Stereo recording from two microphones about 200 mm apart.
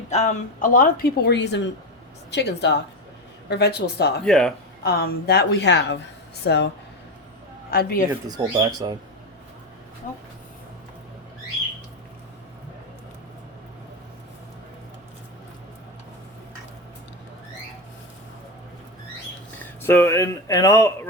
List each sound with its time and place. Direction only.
0.1 s a woman's voice: 35° left (ahead or behind); by 4.1 s 55° left (ahead or behind)
4.3 s speech: centre (ahead or behind)
4.8 s a woman's voice: 50° left (ahead or behind)
7.7 s a woman's voice: 50° left (ahead or behind)
8.1 s speech: 20° right (ahead or behind)
19.8 s speech: 10° left (ahead or behind)